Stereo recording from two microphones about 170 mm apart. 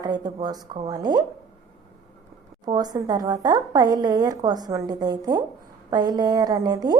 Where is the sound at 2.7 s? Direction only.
20° right (ahead or behind).